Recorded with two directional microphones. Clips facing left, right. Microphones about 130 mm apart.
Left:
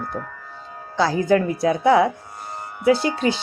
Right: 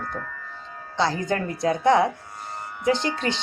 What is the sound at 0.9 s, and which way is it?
A woman's voice, 10° left (ahead or behind).